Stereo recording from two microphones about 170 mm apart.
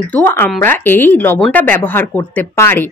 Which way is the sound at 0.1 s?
10° left (ahead or behind).